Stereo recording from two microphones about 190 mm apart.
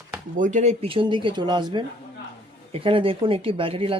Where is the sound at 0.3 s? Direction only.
40° right (ahead or behind).